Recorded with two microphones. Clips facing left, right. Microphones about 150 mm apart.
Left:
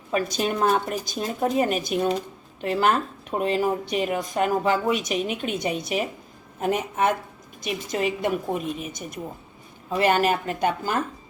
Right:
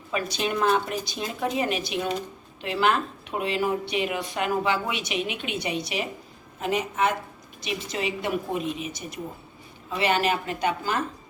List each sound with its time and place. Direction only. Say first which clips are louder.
0.1 s a woman's voice: left 3 dB; 40° left (ahead or behind)